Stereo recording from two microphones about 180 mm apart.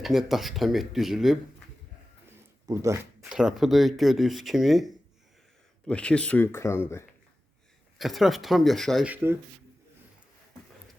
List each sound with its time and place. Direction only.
0.0 s speech: centre (ahead or behind)
2.6 s speech: 15° right (ahead or behind)
3.2 s speech: 5° right (ahead or behind); by 7.0 s 15° left (ahead or behind)
7.9 s speech: centre (ahead or behind)
9.1 s speech: 15° right (ahead or behind)